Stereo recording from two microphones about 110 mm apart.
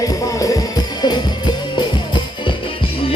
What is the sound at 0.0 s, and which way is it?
Music, 30° left (ahead or behind).